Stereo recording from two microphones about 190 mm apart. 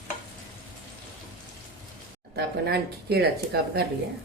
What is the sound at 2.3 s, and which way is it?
Speech, 60° right (ahead or behind).